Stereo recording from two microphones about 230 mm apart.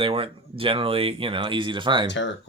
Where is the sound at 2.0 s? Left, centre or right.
Left.